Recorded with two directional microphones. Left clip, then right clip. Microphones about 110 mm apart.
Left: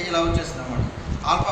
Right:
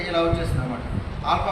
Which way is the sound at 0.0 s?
60° left (ahead or behind).